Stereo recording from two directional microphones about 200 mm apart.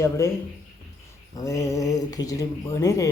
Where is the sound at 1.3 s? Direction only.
15° left (ahead or behind).